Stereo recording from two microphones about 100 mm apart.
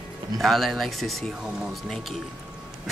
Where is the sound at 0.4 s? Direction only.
Centre (ahead or behind).